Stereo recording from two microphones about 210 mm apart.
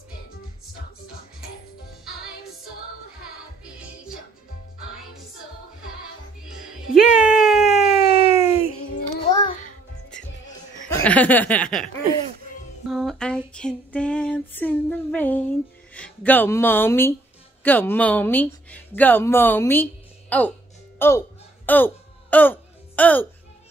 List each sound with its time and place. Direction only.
7.2 s a sound: centre (ahead or behind)
7.9 s child singing: 25° left (ahead or behind)
11.0 s chuckle: 5° left (ahead or behind)
12.8 s female singing: centre (ahead or behind)
17.6 s speech: 10° left (ahead or behind)
21.6 s music: 10° left (ahead or behind)